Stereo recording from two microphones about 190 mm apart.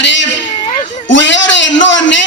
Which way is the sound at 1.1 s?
70° left (ahead or behind).